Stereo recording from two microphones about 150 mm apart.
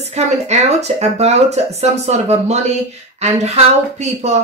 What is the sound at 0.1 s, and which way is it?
Speech, 50° right (ahead or behind).